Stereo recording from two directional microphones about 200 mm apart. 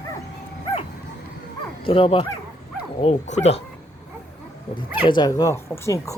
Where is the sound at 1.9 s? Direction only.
25° left (ahead or behind).